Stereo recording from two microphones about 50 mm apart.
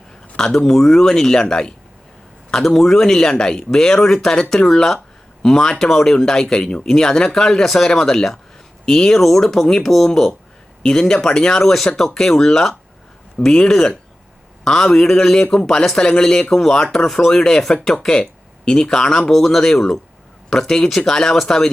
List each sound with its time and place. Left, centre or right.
0.3 s speech: centre
18.2 s a sound: centre
18.9 s speech: centre